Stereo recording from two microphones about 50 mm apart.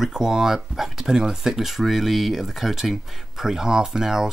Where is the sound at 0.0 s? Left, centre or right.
Centre.